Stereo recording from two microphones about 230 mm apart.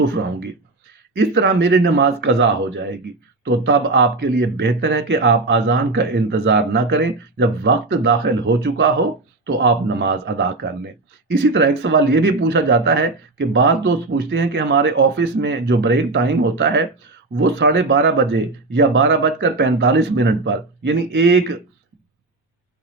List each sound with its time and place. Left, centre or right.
0.0 s speech: right